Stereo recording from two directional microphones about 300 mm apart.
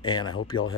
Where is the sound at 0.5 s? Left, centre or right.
Left.